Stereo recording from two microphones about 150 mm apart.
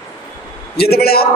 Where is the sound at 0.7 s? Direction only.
90° left.